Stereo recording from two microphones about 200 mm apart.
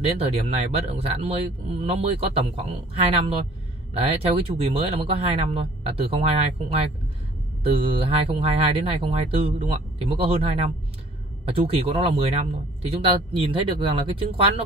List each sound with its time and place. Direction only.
0.2 s a man's voice: 30° right (ahead or behind)
13.5 s a man's voice: 25° right (ahead or behind)